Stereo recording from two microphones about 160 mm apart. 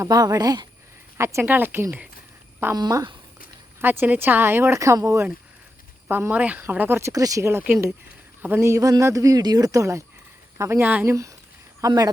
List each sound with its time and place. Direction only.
0.0 s speech: 25° right (ahead or behind)
2.7 s speech: 25° right (ahead or behind)
3.8 s speech: 10° right (ahead or behind)